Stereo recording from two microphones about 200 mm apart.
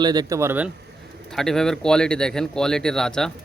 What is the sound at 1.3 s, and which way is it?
Speech, 5° left (ahead or behind).